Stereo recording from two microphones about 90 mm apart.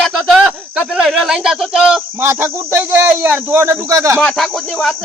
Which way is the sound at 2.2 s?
25° right (ahead or behind).